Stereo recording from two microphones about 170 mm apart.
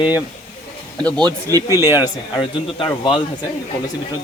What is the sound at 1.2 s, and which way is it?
Speech, 25° right (ahead or behind).